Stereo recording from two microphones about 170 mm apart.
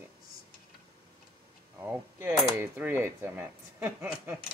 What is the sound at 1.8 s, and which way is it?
Speech, 10° right (ahead or behind).